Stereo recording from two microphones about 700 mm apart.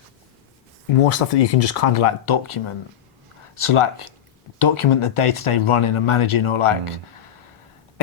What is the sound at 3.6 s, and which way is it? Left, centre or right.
Speech, left.